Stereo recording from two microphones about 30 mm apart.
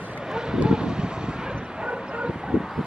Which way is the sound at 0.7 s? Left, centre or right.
Right.